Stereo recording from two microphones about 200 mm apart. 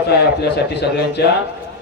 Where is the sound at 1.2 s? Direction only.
55° left (ahead or behind).